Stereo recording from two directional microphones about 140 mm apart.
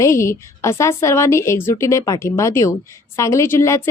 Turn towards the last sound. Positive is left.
turn(degrees=20)  # may be behind; listen again after turning